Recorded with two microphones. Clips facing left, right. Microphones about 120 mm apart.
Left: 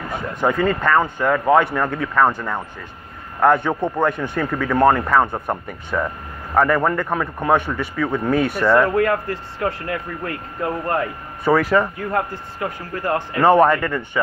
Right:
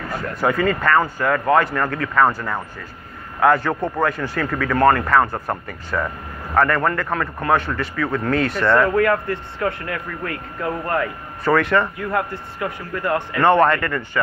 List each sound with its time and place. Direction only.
0.7 s a man's voice: centre (ahead or behind)
8.8 s speech: 25° left (ahead or behind)
11.4 s a man's voice: 5° left (ahead or behind)
12.1 s speech: 30° left (ahead or behind)
13.4 s a man's voice: 10° left (ahead or behind)